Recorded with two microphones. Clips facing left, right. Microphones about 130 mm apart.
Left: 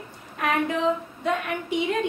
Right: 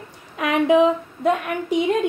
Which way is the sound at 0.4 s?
90° right.